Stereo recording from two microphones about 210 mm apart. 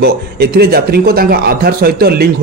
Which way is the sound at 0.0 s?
50° right (ahead or behind).